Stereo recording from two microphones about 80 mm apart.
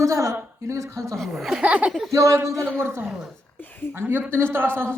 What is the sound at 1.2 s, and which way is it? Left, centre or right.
Speech, centre.